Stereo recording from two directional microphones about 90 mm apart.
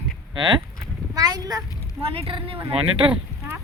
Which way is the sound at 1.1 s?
45° right (ahead or behind).